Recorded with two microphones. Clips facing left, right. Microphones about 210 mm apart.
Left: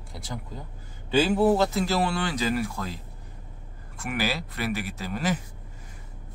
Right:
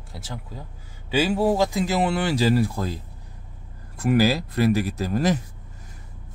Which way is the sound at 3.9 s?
40° right (ahead or behind).